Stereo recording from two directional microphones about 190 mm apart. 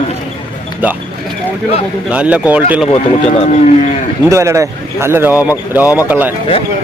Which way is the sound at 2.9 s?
35° left (ahead or behind).